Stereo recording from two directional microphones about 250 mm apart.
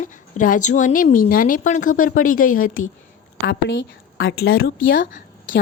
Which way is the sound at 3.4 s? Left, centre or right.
Left.